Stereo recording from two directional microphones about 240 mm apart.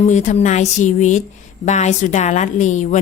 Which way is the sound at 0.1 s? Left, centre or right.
Left.